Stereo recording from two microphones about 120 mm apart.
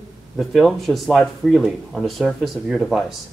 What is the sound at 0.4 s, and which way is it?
Speech, centre (ahead or behind).